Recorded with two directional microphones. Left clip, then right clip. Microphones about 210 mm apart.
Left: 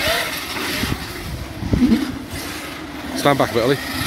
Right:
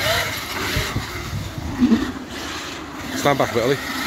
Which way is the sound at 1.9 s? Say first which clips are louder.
Left 1 dB; 30° left (ahead or behind).